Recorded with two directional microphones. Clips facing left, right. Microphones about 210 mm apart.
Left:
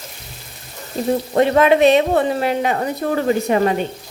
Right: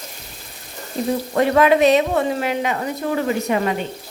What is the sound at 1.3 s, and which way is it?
Speech, 25° left (ahead or behind).